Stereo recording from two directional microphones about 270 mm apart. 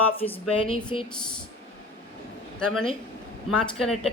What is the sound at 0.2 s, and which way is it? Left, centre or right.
Speech, centre.